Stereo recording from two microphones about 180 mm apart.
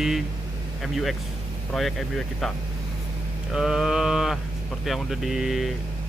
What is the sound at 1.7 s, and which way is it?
Speech, centre (ahead or behind).